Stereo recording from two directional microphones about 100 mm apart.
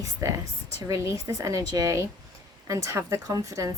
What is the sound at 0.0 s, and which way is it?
A woman's voice, 30° right (ahead or behind).